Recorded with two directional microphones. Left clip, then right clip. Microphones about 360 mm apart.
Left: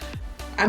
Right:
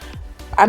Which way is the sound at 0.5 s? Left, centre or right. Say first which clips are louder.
Right 10 dB; right.